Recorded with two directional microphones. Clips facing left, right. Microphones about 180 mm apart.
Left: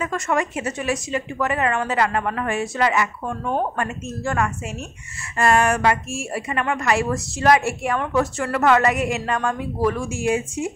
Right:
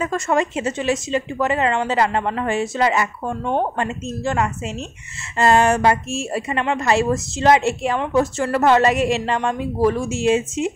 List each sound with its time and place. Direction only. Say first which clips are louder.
0.0 s a woman's voice: right 3 dB; 30° right (ahead or behind)